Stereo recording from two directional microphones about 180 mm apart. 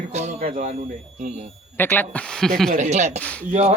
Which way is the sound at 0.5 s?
40° right (ahead or behind).